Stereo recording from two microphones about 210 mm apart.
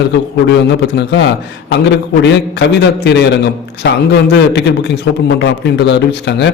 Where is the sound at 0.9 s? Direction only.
55° left (ahead or behind).